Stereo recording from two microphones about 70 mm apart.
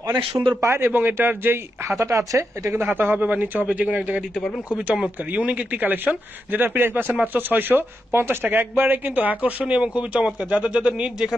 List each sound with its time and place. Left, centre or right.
0.0 s speech: right
0.7 s speech: right
3.0 s speech: right